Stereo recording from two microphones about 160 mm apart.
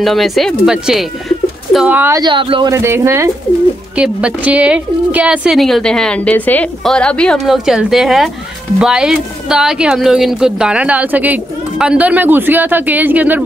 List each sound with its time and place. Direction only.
0.0 s a woman's voice: centre (ahead or behind)
2.1 s speech: 30° right (ahead or behind)
2.7 s a woman's voice: 15° right (ahead or behind)